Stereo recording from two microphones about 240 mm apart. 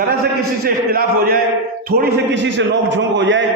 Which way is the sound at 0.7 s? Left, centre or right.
Right.